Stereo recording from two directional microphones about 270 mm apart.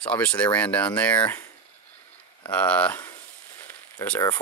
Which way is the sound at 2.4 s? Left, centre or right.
Centre.